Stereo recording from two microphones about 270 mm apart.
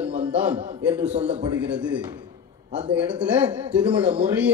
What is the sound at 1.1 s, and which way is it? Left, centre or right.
Speech, right.